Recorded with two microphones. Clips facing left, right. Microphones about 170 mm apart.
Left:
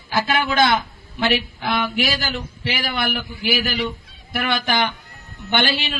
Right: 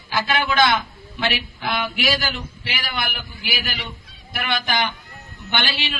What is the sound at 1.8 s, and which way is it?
A man's voice, 40° left (ahead or behind).